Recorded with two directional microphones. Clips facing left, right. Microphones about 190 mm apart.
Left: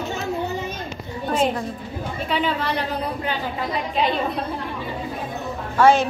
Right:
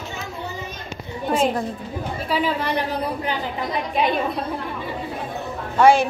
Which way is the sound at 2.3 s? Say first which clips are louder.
Right 1 dB; 15° right (ahead or behind).